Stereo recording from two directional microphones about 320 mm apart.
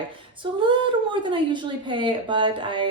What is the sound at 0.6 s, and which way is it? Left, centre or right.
Speech, centre.